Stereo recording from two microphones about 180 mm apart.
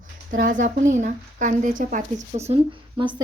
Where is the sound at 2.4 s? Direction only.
30° right (ahead or behind).